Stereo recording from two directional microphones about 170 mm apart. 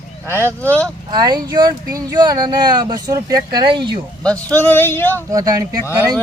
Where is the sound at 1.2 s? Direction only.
25° right (ahead or behind).